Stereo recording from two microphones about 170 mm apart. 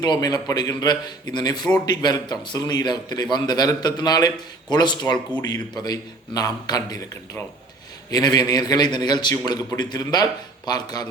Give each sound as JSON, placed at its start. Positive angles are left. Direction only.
{"t": 0.0, "sound": "speech", "side_deg": 25}
{"t": 8.1, "sound": "speech", "side_deg": 25}